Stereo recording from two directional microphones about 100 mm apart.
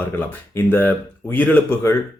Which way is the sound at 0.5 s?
20° left (ahead or behind).